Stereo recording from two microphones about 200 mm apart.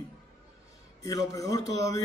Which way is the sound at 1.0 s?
15° left (ahead or behind).